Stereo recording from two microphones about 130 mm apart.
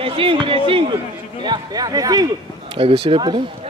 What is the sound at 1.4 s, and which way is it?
Speech, 30° right (ahead or behind).